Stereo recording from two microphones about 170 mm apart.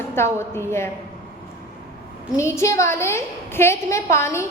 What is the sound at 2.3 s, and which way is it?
A woman's voice, 15° left (ahead or behind).